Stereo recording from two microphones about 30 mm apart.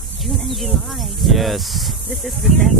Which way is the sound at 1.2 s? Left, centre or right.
Centre.